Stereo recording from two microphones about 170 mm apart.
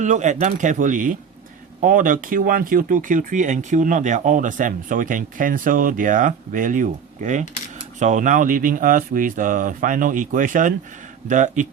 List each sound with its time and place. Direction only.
0.0 s speech: 45° right (ahead or behind)